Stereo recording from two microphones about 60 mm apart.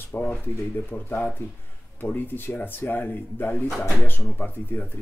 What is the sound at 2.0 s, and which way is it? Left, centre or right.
Speech, left.